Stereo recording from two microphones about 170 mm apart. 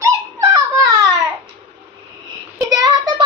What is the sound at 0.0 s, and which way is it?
Dog, 20° right (ahead or behind).